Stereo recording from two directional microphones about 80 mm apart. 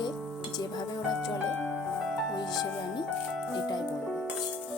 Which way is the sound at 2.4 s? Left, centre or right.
Left.